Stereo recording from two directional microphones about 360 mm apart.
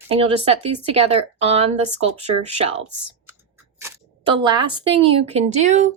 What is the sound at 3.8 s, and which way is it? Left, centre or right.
Speech, centre.